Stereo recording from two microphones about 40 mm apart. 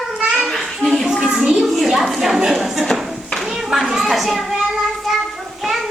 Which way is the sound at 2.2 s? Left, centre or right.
Centre.